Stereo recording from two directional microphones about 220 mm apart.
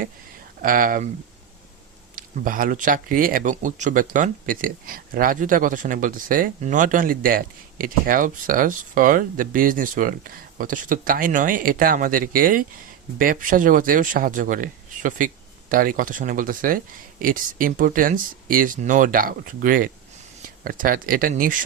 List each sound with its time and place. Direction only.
0.6 s speech: 40° right (ahead or behind)
2.1 s speech: 40° right (ahead or behind)